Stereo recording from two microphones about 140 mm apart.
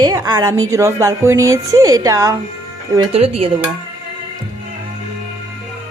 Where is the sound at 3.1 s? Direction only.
45° right (ahead or behind).